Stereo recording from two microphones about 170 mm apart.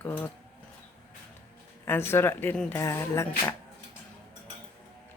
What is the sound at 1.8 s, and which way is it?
Speech, 15° left (ahead or behind).